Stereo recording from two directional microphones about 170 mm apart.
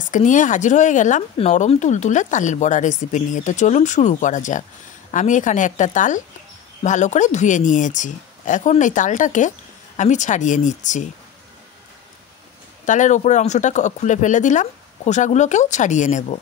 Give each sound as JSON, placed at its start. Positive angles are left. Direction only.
{"t": 0.1, "sound": "speech", "side_deg": 50}
{"t": 12.8, "sound": "speech", "side_deg": 45}